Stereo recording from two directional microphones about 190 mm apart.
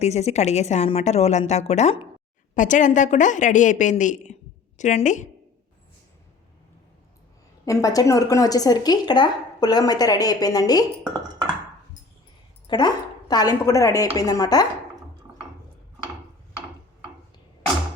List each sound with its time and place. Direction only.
0.0 s speech: 35° left (ahead or behind)
7.6 s a woman's voice: 15° left (ahead or behind)
12.6 s a woman's voice: 25° left (ahead or behind)